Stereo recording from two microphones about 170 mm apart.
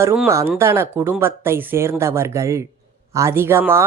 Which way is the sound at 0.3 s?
15° right (ahead or behind).